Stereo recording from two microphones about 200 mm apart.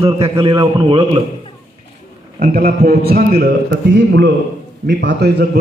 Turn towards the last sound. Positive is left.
turn(degrees=-55)  # may be behind; listen again after turning